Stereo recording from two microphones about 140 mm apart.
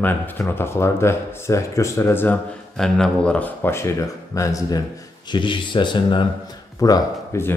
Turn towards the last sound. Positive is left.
turn(degrees=20)  # may be behind; listen again after turning